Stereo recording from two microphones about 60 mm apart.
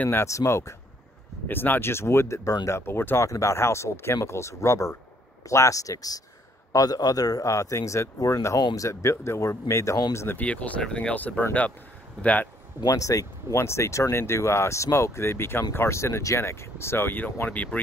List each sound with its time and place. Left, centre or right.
0.2 s speech: left
1.5 s speech: left
2.7 s speech: left
3.3 s speech: left
10.4 s speech: left
12.9 s speech: left
13.6 s speech: left